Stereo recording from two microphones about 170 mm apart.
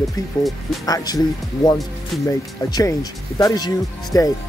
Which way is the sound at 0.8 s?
20° left (ahead or behind).